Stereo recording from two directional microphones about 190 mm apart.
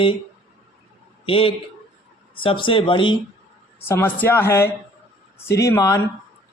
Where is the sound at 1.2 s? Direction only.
30° left (ahead or behind).